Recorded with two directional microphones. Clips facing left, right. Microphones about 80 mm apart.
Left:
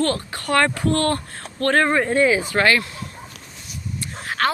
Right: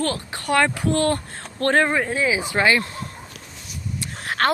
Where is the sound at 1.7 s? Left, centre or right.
Centre.